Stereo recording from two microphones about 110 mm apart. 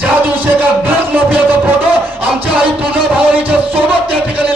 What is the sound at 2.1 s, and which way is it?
Music, 15° right (ahead or behind).